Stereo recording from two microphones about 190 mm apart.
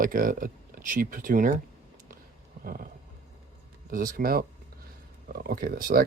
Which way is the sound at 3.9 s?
45° right (ahead or behind).